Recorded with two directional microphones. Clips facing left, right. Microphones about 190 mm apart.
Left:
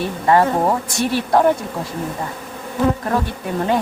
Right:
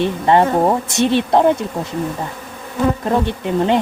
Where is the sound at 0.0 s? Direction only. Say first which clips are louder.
Right 2 dB; 25° right (ahead or behind).